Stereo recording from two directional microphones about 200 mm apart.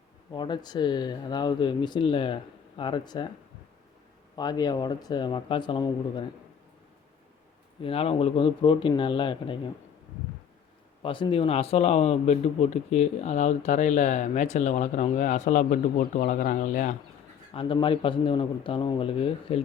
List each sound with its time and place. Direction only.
0.3 s speech: 20° left (ahead or behind)
4.4 s speech: 20° left (ahead or behind)
7.8 s speech: 30° left (ahead or behind)
11.0 s speech: 25° left (ahead or behind); by 16.9 s 40° left (ahead or behind)
17.5 s speech: 25° left (ahead or behind)